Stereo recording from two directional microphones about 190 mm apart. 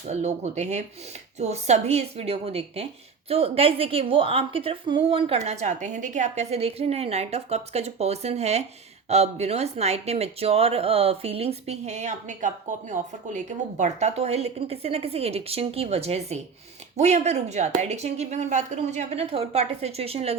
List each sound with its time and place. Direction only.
0.1 s a woman's voice: 35° right (ahead or behind)